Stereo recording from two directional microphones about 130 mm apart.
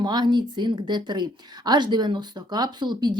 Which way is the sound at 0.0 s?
35° right (ahead or behind).